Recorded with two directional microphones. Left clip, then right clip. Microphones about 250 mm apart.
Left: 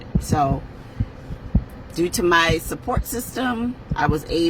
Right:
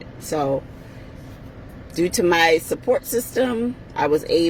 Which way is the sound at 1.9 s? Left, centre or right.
Centre.